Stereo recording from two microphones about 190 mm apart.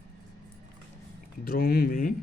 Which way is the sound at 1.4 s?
50° left (ahead or behind).